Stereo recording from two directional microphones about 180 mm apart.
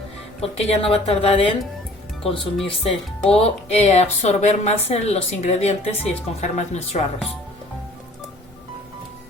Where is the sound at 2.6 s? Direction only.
35° left (ahead or behind).